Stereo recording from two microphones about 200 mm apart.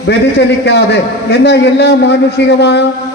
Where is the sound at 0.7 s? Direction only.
55° left (ahead or behind).